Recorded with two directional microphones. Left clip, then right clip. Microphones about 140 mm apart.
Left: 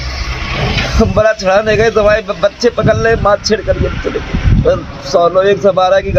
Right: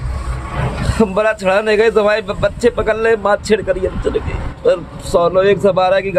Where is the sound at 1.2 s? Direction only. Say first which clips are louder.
Left 5 dB; 40° right (ahead or behind).